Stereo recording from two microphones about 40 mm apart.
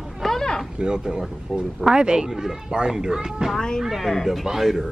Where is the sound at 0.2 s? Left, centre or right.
Centre.